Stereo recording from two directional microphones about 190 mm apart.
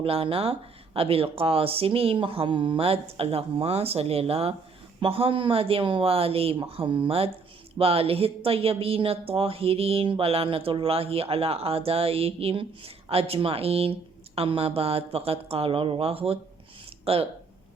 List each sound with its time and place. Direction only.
0.0 s a woman's voice: 30° right (ahead or behind)